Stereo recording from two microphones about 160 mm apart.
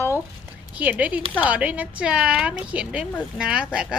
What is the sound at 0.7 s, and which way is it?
Speech, 10° right (ahead or behind).